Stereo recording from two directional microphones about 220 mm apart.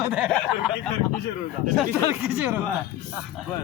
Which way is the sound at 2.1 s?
10° right (ahead or behind).